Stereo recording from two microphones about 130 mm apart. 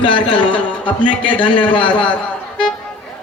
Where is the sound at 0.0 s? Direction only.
40° left (ahead or behind).